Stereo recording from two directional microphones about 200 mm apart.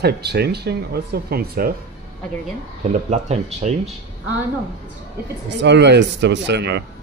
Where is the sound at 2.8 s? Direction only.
35° right (ahead or behind).